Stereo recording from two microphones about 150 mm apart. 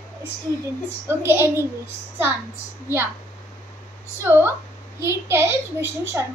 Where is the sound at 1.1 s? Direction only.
15° right (ahead or behind).